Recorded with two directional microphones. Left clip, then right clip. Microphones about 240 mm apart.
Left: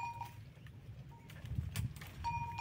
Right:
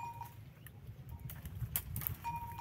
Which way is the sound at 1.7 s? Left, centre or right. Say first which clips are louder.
Right 3 dB; right.